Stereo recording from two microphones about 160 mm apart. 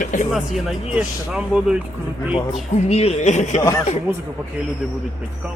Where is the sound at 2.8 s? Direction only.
40° left (ahead or behind).